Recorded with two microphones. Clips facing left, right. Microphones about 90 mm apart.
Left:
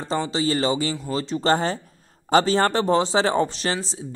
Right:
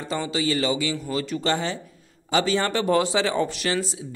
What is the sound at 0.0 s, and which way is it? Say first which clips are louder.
A man's voice: left 2 dB; 30° left (ahead or behind).